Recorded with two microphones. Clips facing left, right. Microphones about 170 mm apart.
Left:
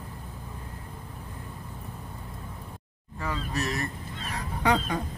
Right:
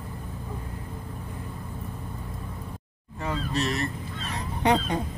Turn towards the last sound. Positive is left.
turn(degrees=-25)  # may be behind; listen again after turning